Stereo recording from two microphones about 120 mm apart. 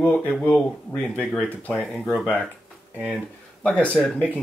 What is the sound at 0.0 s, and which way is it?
Speech, 15° left (ahead or behind).